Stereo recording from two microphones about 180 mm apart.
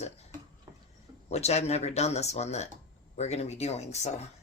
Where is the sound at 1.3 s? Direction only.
35° left (ahead or behind).